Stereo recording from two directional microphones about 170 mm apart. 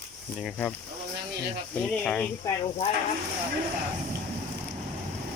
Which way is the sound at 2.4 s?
30° left (ahead or behind).